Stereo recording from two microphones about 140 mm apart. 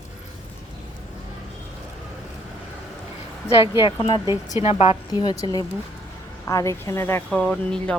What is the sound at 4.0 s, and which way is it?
Speech, 40° left (ahead or behind).